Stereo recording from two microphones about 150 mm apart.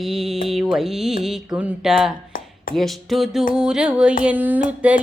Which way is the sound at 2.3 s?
65° left (ahead or behind).